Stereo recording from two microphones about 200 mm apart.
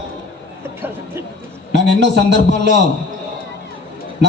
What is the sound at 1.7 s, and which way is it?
A man's voice, 60° right (ahead or behind).